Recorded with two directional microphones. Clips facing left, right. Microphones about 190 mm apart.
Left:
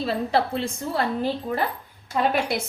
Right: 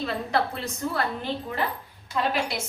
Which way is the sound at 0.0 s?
30° left (ahead or behind).